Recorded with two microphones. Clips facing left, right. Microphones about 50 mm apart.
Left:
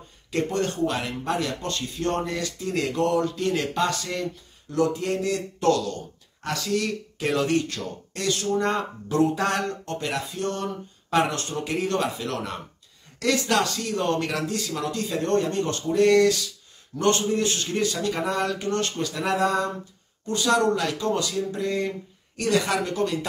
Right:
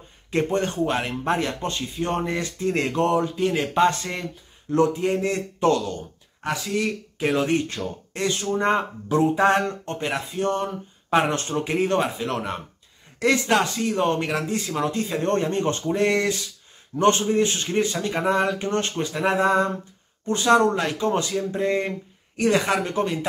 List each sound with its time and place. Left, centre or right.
0.3 s speech: right